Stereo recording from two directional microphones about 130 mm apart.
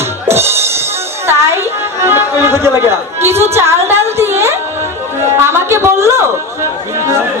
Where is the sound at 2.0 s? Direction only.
20° right (ahead or behind).